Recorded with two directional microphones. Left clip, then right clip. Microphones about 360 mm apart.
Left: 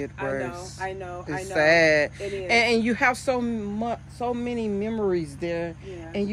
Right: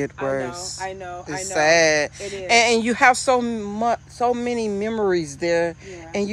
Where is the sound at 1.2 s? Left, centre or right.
Centre.